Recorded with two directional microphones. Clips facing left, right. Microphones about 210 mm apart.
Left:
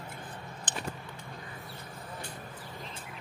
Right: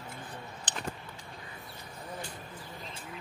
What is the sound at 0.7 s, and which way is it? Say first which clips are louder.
Vehicle: left 2 dB; 50° left (ahead or behind).